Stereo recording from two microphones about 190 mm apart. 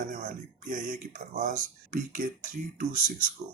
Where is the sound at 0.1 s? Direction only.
45° right (ahead or behind).